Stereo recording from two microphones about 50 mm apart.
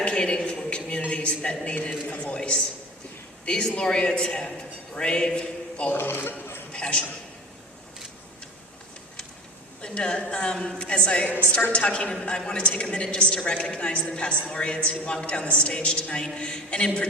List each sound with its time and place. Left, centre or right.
0.0 s a sound: left
1.7 s a woman's voice: left
4.9 s a sound: centre
5.9 s a man's voice: left
6.7 s a man's voice: left
9.8 s a woman's voice: centre